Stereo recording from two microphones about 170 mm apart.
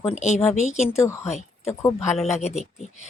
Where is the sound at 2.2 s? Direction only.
40° left (ahead or behind).